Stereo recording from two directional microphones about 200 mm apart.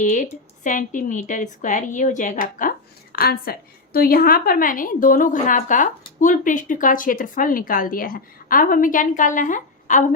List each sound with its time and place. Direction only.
0.0 s speech: 40° left (ahead or behind)